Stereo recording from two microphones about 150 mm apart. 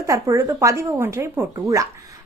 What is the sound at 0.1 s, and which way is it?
A woman's voice, 20° right (ahead or behind).